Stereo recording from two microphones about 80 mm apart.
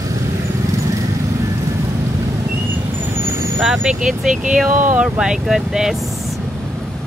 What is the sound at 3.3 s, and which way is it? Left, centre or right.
Vehicle, right.